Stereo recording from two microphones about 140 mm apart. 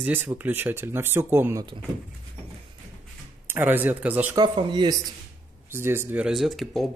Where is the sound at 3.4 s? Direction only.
15° right (ahead or behind).